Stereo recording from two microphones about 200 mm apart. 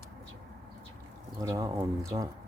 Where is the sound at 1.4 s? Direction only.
15° right (ahead or behind).